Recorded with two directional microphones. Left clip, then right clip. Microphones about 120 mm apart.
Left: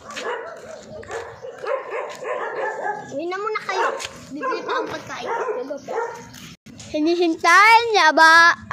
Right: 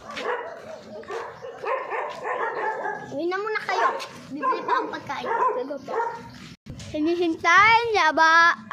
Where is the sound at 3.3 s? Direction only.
40° right (ahead or behind).